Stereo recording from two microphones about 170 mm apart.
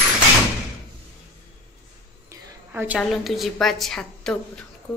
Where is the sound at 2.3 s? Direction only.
10° right (ahead or behind).